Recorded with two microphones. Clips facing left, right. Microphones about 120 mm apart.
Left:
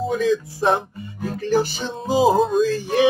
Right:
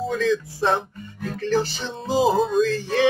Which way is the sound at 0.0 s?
15° left (ahead or behind).